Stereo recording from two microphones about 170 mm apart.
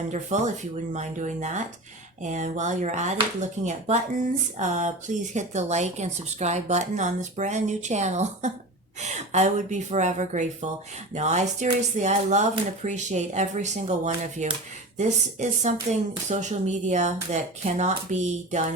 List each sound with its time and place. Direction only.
0.1 s speech: 45° right (ahead or behind)